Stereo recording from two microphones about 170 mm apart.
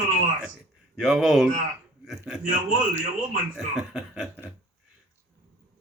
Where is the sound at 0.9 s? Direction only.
Centre (ahead or behind).